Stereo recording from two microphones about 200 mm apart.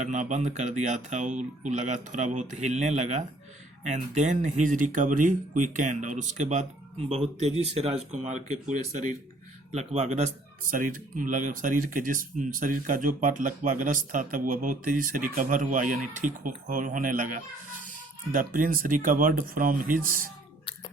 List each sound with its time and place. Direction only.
0.0 s speech: 35° right (ahead or behind)